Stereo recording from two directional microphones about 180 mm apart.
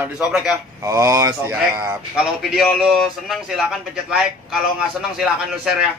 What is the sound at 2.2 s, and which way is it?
A man's voice, centre (ahead or behind).